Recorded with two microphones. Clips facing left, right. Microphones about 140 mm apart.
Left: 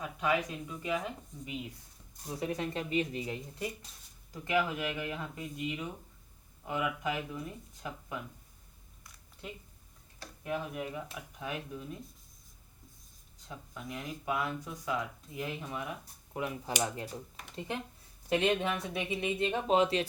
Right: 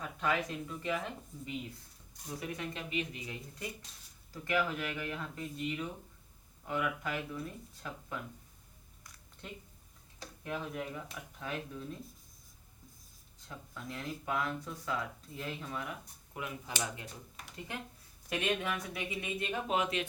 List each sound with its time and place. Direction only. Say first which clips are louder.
0.0 s speech: left 2 dB; 10° left (ahead or behind)
2.2 s speech: left 5 dB; 35° left (ahead or behind)
4.3 s speech: left 2 dB; 15° left (ahead or behind)
9.4 s speech: left 2 dB; 5° left (ahead or behind)
13.5 s speech: left 2 dB; 10° left (ahead or behind)
16.3 s speech: left 6 dB; 30° left (ahead or behind)
18.3 s speech: left 5 dB; 25° left (ahead or behind)